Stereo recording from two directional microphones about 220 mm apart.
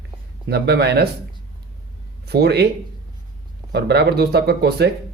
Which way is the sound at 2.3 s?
50° right (ahead or behind).